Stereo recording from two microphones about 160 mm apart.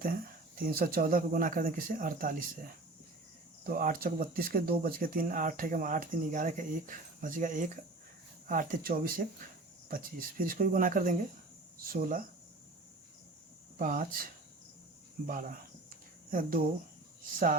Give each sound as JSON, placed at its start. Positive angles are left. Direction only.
{"t": 0.0, "sound": "speech", "side_deg": -65}
{"t": 3.6, "sound": "speech", "side_deg": -60}
{"t": 13.7, "sound": "speech", "side_deg": -60}
{"t": 15.3, "sound": "speech", "side_deg": -60}